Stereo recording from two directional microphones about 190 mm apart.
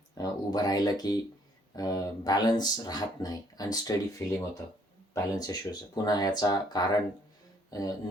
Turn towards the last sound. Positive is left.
turn(degrees=20)  # may be behind; listen again after turning